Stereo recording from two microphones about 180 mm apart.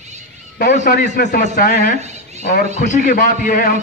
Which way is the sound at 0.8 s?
55° left (ahead or behind).